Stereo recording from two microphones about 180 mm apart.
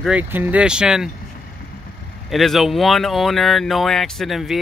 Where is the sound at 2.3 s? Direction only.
Centre (ahead or behind).